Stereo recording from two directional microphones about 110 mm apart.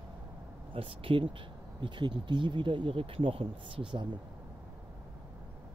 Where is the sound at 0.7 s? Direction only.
55° right (ahead or behind).